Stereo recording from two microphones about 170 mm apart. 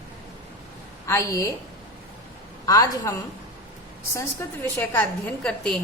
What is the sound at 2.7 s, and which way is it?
Speech, 20° left (ahead or behind).